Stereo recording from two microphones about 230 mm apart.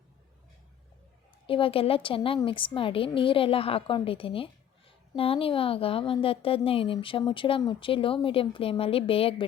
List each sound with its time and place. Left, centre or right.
1.5 s a woman's voice: left